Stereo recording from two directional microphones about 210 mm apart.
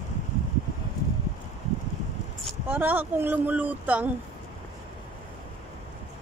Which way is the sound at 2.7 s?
10° right (ahead or behind).